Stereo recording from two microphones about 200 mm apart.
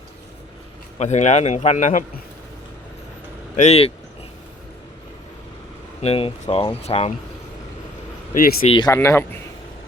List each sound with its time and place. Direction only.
0.9 s a man's voice: 35° left (ahead or behind)
3.5 s speech: 35° left (ahead or behind)
6.0 s speech: 30° left (ahead or behind)
8.3 s speech: 45° left (ahead or behind)
8.6 s speech: 25° left (ahead or behind)
8.9 s speech: 15° left (ahead or behind)